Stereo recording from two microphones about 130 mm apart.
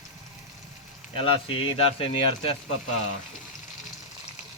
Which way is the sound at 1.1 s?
45° left (ahead or behind).